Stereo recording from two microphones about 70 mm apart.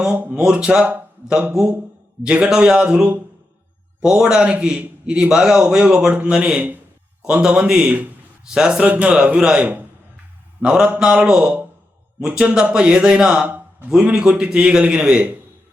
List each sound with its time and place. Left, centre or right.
0.0 s a man's voice: centre
2.2 s a man's voice: centre